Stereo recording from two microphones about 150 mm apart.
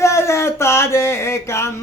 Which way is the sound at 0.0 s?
20° left (ahead or behind).